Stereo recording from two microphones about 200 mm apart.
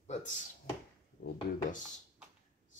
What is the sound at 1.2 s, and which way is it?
Speech, 60° left (ahead or behind).